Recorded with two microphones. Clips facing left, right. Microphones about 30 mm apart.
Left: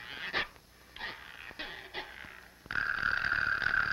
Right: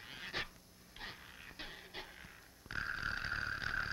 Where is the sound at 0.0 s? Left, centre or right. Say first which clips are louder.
Left 8 dB; left.